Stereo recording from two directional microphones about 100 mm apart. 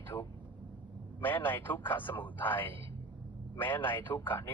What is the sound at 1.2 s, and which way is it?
A man's voice, 20° left (ahead or behind).